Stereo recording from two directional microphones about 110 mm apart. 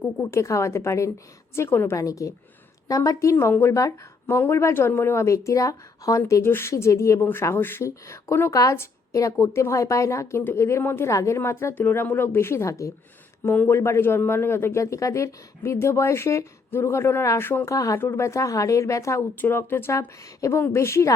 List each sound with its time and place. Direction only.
0.2 s speech: 25° left (ahead or behind)
17.7 s speech: 30° left (ahead or behind)